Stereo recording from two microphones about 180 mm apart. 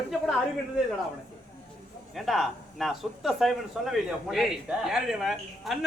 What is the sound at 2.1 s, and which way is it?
Speech, centre (ahead or behind).